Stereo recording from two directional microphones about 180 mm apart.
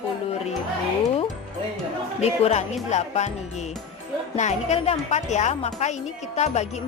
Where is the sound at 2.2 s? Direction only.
35° left (ahead or behind).